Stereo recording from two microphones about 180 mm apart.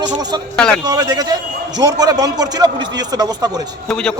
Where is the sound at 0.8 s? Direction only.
20° right (ahead or behind).